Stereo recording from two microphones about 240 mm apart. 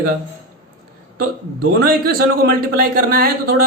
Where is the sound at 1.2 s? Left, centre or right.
Right.